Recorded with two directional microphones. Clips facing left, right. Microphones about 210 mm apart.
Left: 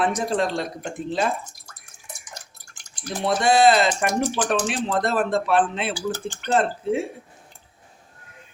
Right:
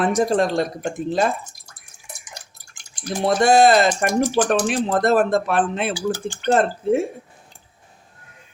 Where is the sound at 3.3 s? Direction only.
45° right (ahead or behind).